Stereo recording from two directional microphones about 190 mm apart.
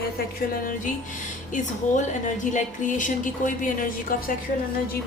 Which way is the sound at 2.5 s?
45° left (ahead or behind).